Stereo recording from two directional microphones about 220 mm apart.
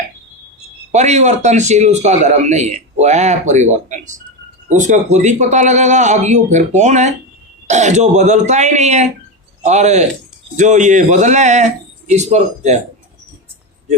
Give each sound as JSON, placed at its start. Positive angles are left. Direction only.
{"t": 0.9, "sound": "a man's voice", "side_deg": -30}